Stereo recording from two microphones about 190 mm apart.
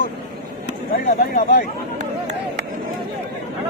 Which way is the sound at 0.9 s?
50° left (ahead or behind).